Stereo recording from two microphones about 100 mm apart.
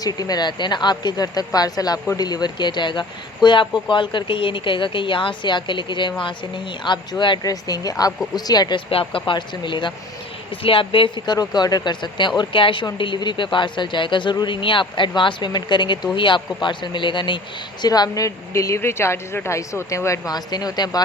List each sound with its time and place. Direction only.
0.0 s a woman's voice: 40° left (ahead or behind)
7.4 s a woman's voice: 40° left (ahead or behind)
8.9 s speech: 65° left (ahead or behind)
17.8 s a woman's voice: 40° left (ahead or behind)